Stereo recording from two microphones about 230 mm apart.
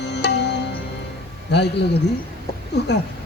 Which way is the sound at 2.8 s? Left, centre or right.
Left.